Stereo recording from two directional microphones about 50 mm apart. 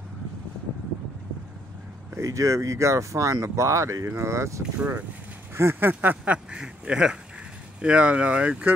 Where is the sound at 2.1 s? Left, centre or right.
Right.